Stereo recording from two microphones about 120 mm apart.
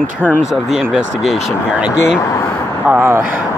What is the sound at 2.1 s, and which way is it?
Speech, 25° left (ahead or behind).